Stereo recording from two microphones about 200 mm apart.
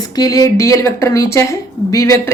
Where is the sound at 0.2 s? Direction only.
15° left (ahead or behind).